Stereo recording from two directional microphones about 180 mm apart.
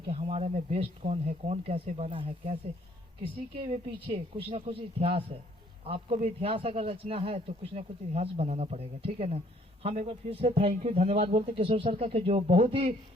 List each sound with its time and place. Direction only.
0.1 s a man's voice: 35° right (ahead or behind)
10.1 s a man's voice: 30° right (ahead or behind)